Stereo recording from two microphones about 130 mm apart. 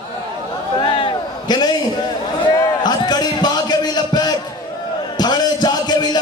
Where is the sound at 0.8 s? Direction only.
40° left (ahead or behind).